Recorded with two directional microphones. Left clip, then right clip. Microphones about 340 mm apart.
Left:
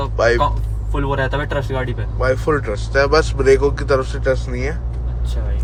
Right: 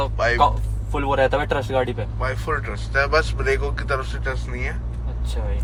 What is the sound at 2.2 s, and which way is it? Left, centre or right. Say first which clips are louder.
Speech: left 8 dB; centre.